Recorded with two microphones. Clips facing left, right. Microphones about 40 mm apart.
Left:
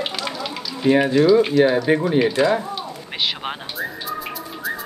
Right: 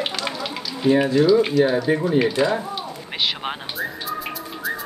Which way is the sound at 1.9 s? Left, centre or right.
Left.